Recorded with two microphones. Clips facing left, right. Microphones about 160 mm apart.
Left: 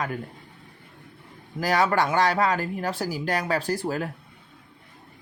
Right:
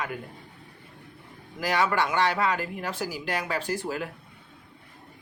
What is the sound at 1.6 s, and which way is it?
Speech, 40° left (ahead or behind).